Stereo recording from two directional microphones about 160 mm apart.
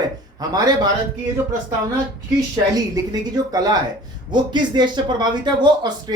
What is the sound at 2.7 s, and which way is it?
Speech, 25° right (ahead or behind).